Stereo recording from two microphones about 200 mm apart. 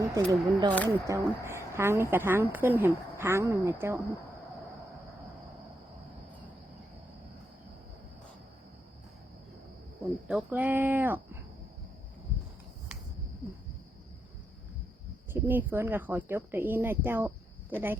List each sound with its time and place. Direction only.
0.0 s a woman's voice: 15° right (ahead or behind)
10.5 s a woman's voice: 10° right (ahead or behind)
15.3 s a woman's voice: 10° right (ahead or behind)